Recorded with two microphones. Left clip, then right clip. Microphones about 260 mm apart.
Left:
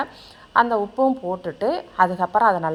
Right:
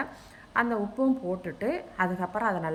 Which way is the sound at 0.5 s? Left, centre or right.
Left.